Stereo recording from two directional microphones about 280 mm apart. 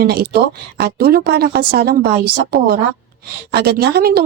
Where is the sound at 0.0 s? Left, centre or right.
Right.